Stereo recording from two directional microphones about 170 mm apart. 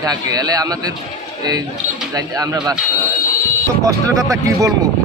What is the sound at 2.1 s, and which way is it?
Speech, 20° right (ahead or behind).